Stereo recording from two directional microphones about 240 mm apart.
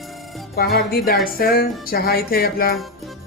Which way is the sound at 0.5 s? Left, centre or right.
Left.